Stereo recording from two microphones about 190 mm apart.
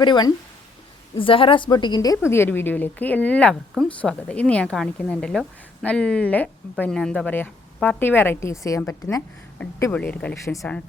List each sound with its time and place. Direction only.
0.0 s a woman's voice: 20° left (ahead or behind); by 10.8 s 5° left (ahead or behind)